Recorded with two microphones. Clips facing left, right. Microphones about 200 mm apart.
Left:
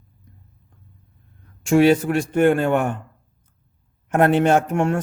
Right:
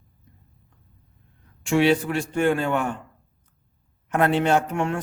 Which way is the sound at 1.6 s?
45° left (ahead or behind).